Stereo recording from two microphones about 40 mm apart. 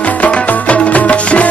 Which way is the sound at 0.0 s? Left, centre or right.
Left.